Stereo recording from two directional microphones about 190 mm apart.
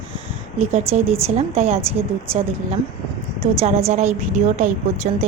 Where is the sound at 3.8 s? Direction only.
35° right (ahead or behind).